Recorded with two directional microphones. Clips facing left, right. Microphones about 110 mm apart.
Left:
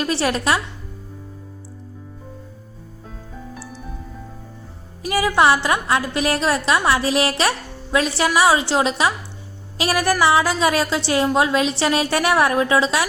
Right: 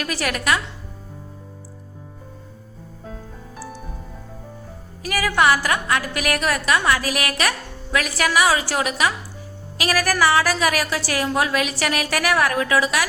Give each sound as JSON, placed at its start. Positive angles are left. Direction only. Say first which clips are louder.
{"t": 0.0, "sound": "a woman's voice", "louder": "left 4 dB", "side_deg": 30}
{"t": 5.0, "sound": "a woman's voice", "louder": "left 2 dB", "side_deg": 25}